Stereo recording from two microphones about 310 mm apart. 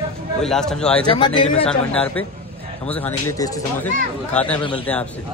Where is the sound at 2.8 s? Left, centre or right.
Centre.